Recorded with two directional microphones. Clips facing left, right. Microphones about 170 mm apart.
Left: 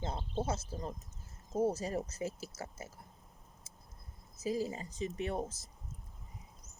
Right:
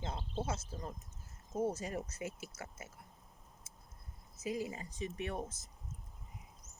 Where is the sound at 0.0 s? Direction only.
30° left (ahead or behind).